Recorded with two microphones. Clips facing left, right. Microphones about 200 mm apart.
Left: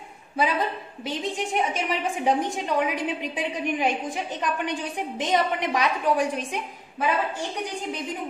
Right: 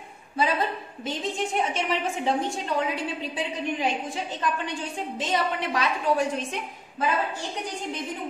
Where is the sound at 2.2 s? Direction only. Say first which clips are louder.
Left 4 dB; 15° left (ahead or behind).